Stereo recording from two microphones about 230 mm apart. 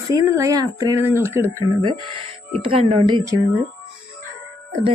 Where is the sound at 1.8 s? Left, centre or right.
Right.